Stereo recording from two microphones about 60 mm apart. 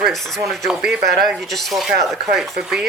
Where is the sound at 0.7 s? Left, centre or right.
Centre.